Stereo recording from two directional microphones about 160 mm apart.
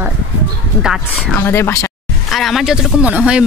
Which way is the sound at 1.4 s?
15° left (ahead or behind).